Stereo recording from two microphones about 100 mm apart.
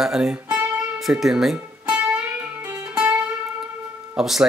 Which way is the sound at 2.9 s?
10° right (ahead or behind).